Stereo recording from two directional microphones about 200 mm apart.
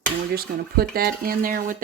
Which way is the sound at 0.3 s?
50° right (ahead or behind).